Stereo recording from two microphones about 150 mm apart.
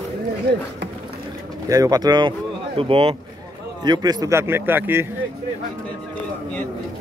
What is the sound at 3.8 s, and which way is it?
A man's voice, 30° right (ahead or behind).